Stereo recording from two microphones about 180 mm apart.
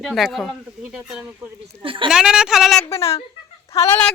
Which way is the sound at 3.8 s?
10° left (ahead or behind).